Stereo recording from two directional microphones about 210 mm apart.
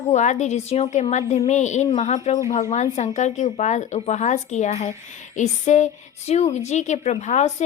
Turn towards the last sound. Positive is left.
turn(degrees=35)  # may be behind; listen again after turning